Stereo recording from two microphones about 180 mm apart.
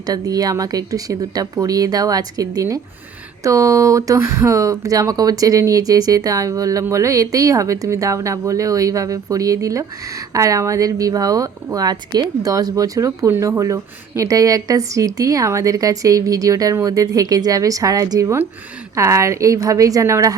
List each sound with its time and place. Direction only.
0.0 s a woman's voice: 20° right (ahead or behind)